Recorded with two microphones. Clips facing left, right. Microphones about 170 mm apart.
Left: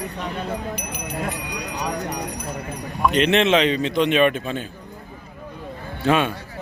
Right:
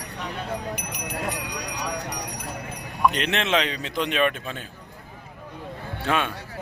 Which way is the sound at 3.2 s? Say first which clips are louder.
Left 7 dB; centre (ahead or behind).